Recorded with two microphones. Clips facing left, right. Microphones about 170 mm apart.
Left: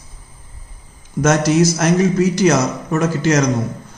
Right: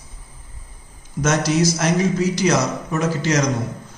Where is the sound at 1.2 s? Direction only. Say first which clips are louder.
Left 4 dB; 50° left (ahead or behind).